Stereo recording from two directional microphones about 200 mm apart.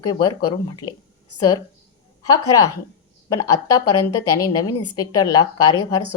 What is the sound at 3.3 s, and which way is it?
A woman's voice, 15° left (ahead or behind).